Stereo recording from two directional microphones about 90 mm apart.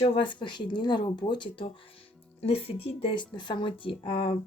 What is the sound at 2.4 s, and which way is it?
Speech, 90° left.